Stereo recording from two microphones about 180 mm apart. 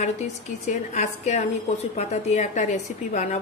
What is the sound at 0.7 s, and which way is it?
A woman's voice, 40° left (ahead or behind).